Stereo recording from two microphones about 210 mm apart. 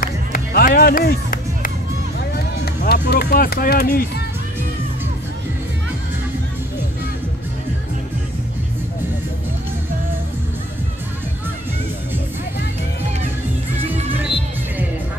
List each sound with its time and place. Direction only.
0.0 s music: 45° left (ahead or behind)
2.1 s speech: 50° left (ahead or behind)